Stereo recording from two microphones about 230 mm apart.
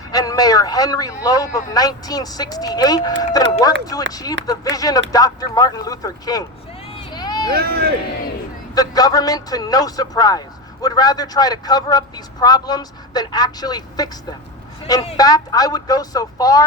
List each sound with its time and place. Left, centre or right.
0.1 s speech: centre
6.9 s vehicle: centre
7.5 s speech: right
8.7 s speech: centre